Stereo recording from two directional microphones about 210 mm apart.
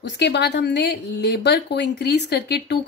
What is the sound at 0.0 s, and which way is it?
Speech, 55° left (ahead or behind).